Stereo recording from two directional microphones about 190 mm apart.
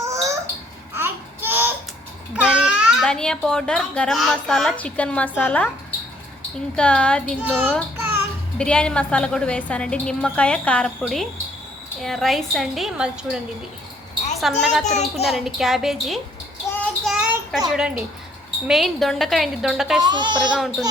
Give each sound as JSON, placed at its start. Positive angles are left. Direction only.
{"t": 0.0, "sound": "a sound", "side_deg": -15}
{"t": 0.9, "sound": "babbling", "side_deg": -10}
{"t": 2.3, "sound": "a child's voice", "side_deg": -5}
{"t": 6.7, "sound": "a woman's voice", "side_deg": 5}
{"t": 7.4, "sound": "a child's voice", "side_deg": -10}
{"t": 7.9, "sound": "music", "side_deg": -10}
{"t": 8.5, "sound": "a woman's voice", "side_deg": 5}
{"t": 14.4, "sound": "a woman's voice", "side_deg": 0}
{"t": 14.8, "sound": "a child's voice", "side_deg": 35}
{"t": 15.2, "sound": "a woman's voice", "side_deg": 0}
{"t": 17.0, "sound": "child singing", "side_deg": 0}
{"t": 17.7, "sound": "a woman's voice", "side_deg": -5}
{"t": 20.0, "sound": "speech", "side_deg": -25}
{"t": 20.4, "sound": "a woman's voice", "side_deg": 0}